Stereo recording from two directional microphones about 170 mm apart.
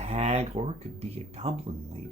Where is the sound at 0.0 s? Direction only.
40° right (ahead or behind).